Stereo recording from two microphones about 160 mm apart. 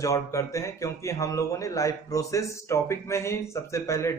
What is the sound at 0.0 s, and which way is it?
A man's voice, 20° left (ahead or behind).